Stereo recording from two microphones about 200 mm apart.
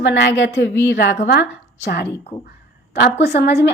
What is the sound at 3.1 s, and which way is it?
Speech, 55° left (ahead or behind).